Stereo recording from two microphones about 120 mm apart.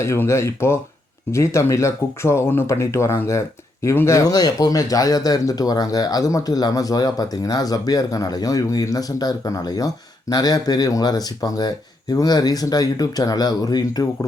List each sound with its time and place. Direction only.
0.0 s speech: 20° left (ahead or behind)